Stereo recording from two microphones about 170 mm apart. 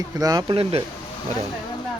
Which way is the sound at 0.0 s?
20° right (ahead or behind).